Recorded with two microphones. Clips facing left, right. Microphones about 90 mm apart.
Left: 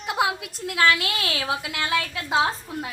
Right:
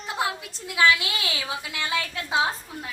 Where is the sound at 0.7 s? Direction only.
Centre (ahead or behind).